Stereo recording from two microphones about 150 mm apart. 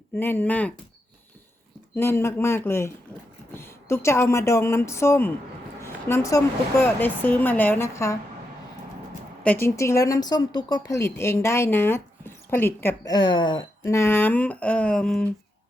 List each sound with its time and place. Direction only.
0.2 s a woman's voice: 15° left (ahead or behind)
2.0 s a woman's voice: 15° left (ahead or behind)
5.8 s a sound: 15° left (ahead or behind)
6.8 s a woman's voice: 15° left (ahead or behind)
9.4 s a woman's voice: 10° left (ahead or behind)
13.1 s speech: 30° left (ahead or behind)
13.8 s a woman's voice: 20° left (ahead or behind)